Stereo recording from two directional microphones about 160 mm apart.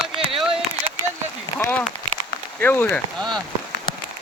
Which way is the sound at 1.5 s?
15° left (ahead or behind).